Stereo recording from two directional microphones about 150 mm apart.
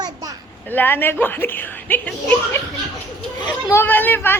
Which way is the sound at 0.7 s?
15° left (ahead or behind).